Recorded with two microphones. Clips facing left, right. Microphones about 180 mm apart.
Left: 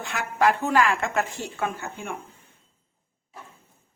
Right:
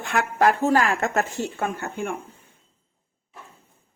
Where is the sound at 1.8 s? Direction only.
55° right (ahead or behind).